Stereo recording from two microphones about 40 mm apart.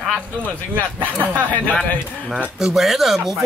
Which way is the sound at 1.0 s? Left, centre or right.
Right.